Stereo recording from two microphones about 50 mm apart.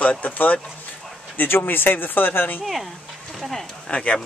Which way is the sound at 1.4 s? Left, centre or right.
Left.